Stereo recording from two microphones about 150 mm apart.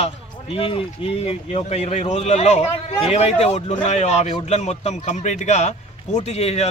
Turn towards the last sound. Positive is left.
turn(degrees=45)  # may be behind; listen again after turning